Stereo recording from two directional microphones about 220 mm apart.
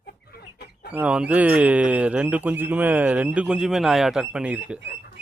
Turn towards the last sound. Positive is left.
turn(degrees=-5)  # may be behind; listen again after turning